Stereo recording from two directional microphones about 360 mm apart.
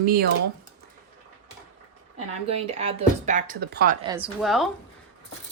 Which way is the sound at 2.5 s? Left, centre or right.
Centre.